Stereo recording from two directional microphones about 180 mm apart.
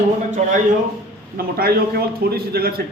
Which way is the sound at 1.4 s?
55° right (ahead or behind).